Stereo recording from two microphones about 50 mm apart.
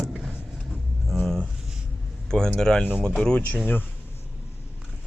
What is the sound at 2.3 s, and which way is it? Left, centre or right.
Speech, centre.